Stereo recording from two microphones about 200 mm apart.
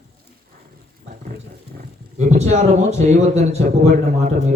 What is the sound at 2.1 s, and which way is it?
Speech, 35° right (ahead or behind).